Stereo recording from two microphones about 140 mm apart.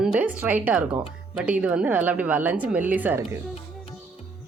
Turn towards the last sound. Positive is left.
turn(degrees=-10)  # may be behind; listen again after turning